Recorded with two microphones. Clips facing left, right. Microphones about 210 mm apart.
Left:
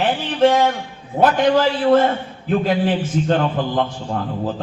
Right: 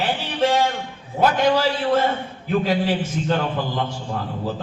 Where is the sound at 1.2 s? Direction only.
50° left (ahead or behind).